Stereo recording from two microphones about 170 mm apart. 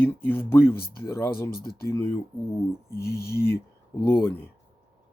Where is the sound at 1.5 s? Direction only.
65° left (ahead or behind).